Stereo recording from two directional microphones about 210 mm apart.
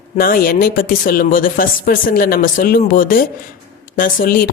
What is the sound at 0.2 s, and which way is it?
A woman's voice, 45° left (ahead or behind).